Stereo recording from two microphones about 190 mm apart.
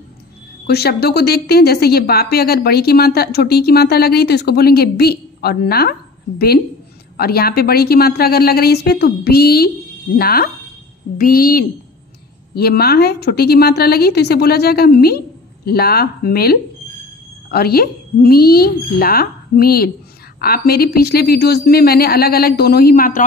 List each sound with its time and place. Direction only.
0.7 s a woman's voice: 55° left (ahead or behind)